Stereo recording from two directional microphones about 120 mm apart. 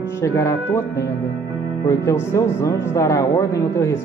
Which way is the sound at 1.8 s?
25° left (ahead or behind).